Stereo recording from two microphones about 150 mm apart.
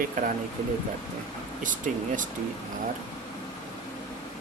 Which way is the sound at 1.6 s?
60° right (ahead or behind).